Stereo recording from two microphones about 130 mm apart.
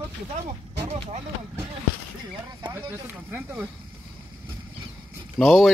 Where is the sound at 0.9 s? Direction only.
55° right (ahead or behind).